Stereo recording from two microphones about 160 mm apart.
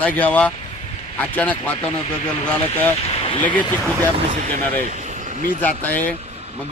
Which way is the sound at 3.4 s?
10° left (ahead or behind).